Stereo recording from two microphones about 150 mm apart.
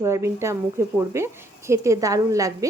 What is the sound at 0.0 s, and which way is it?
Speech, 20° right (ahead or behind).